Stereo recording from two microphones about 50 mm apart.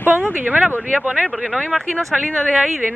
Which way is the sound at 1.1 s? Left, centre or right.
Centre.